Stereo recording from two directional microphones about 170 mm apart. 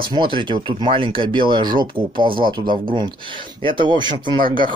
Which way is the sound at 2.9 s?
30° right (ahead or behind).